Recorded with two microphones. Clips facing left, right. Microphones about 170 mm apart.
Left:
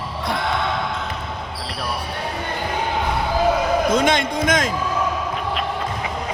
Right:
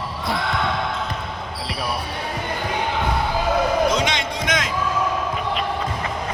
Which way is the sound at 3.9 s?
50° left (ahead or behind).